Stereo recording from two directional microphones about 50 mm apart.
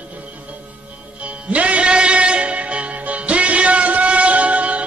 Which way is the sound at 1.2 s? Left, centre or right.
Right.